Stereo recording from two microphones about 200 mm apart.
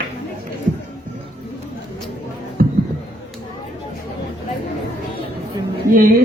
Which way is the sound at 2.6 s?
45° right (ahead or behind).